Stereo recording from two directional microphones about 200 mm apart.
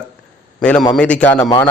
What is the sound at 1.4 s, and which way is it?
Speech, 20° left (ahead or behind).